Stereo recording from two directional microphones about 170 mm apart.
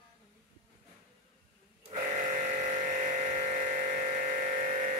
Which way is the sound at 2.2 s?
45° right (ahead or behind).